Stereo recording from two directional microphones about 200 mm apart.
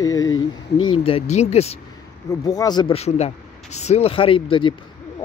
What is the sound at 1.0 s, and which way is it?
Speech, 30° left (ahead or behind).